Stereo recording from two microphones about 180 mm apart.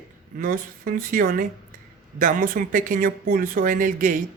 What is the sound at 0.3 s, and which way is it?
Speech, 50° right (ahead or behind).